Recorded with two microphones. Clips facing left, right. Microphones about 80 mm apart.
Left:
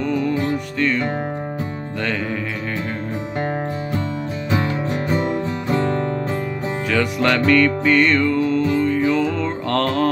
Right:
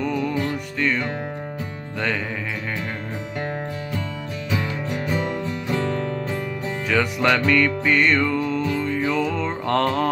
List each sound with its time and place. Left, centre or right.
0.7 s music: centre
3.3 s music: left
6.9 s music: centre